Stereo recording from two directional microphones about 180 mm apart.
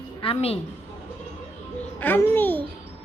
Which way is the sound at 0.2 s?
30° left (ahead or behind).